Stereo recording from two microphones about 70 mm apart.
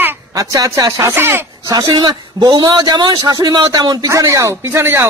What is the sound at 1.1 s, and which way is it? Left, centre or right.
Speech, right.